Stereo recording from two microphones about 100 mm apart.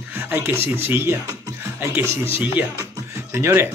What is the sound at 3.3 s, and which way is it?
Speech, 25° right (ahead or behind).